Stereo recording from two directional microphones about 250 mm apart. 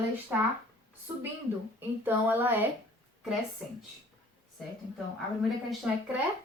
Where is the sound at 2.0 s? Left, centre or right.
Centre.